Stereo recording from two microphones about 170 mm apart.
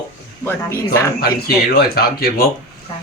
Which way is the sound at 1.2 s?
65° left (ahead or behind).